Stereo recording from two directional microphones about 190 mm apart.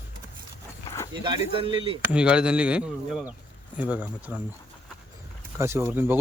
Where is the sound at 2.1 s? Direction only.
5° right (ahead or behind).